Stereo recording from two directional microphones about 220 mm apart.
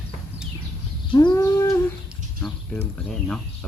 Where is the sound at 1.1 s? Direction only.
15° left (ahead or behind).